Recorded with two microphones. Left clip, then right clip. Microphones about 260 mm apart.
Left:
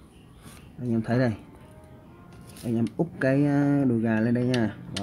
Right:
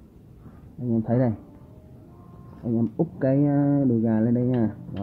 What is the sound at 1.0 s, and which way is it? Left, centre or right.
Speech, centre.